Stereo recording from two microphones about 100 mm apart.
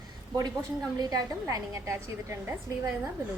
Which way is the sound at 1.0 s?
40° right (ahead or behind).